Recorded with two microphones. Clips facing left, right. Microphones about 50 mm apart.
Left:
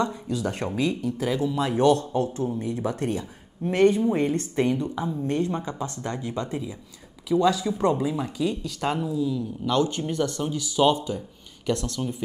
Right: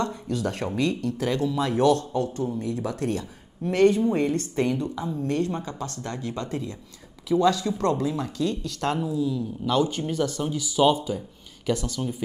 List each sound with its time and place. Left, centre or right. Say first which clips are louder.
0.0 s speech: left 1 dB; centre
7.2 s speech: even; centre